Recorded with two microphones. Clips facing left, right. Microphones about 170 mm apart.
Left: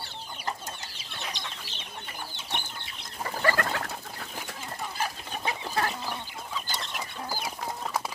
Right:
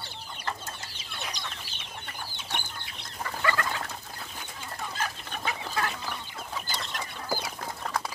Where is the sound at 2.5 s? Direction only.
Centre (ahead or behind).